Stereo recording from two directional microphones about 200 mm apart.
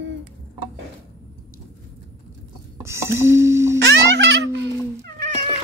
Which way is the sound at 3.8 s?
60° right (ahead or behind).